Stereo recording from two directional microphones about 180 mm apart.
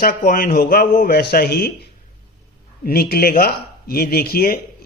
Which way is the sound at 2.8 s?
60° left (ahead or behind).